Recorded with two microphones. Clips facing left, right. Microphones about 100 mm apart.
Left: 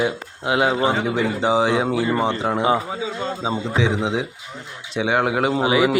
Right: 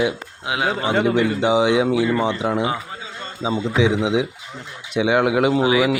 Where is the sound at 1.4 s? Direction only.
35° left (ahead or behind).